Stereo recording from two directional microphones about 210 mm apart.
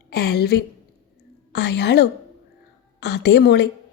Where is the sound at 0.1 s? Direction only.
50° left (ahead or behind).